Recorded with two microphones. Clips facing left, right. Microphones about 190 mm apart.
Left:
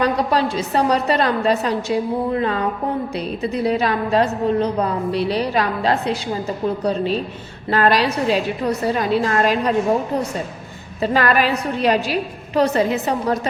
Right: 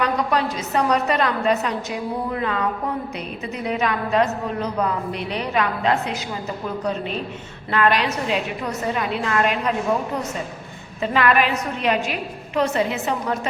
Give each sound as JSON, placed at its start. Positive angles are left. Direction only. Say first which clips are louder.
{"t": 0.0, "sound": "a woman's voice", "louder": "left 3 dB", "side_deg": 30}
{"t": 11.0, "sound": "a woman's voice", "louder": "left 2 dB", "side_deg": 35}